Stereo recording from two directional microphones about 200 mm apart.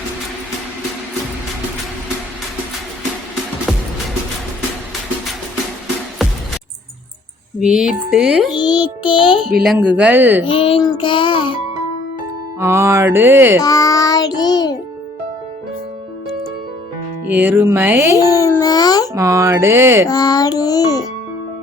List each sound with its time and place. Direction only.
6.2 s music: centre (ahead or behind)
7.6 s speech: 5° right (ahead or behind)
8.5 s a child's voice: 20° left (ahead or behind)
9.7 s speech: 5° right (ahead or behind)
10.4 s a child's voice: 25° left (ahead or behind)
12.5 s speech: 10° right (ahead or behind)
13.6 s child singing: 15° left (ahead or behind)
17.3 s speech: 10° right (ahead or behind)
18.2 s child singing: 15° left (ahead or behind)
19.1 s speech: 15° right (ahead or behind)
20.1 s a child's voice: 20° left (ahead or behind)